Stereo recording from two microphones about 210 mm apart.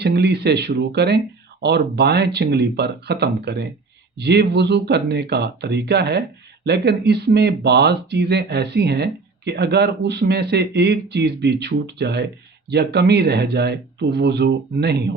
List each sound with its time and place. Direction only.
0.0 s speech: 50° right (ahead or behind)